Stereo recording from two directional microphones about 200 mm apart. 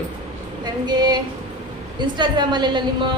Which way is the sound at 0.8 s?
20° right (ahead or behind).